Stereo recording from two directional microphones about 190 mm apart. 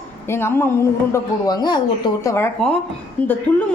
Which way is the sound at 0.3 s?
15° left (ahead or behind).